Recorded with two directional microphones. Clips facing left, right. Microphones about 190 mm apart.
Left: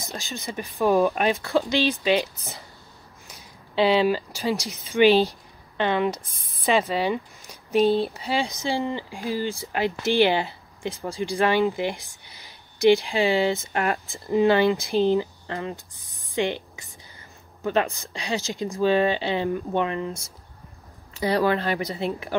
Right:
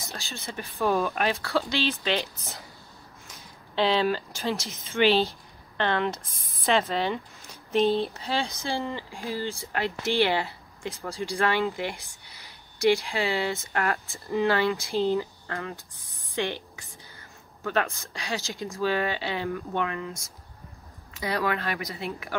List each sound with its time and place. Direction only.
0.0 s speech: 15° left (ahead or behind)
3.3 s speech: 10° left (ahead or behind)
13.0 s a woman's voice: 20° left (ahead or behind)